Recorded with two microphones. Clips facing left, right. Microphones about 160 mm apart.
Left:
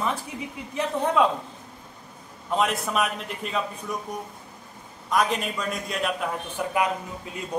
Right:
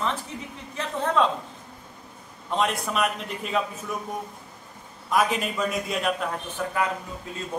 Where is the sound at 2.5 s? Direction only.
Centre (ahead or behind).